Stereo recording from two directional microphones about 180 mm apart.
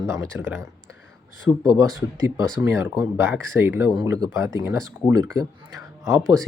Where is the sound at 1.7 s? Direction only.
20° right (ahead or behind).